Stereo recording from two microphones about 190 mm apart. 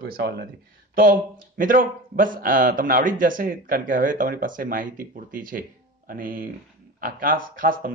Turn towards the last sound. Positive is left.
turn(degrees=-45)  # may be behind; listen again after turning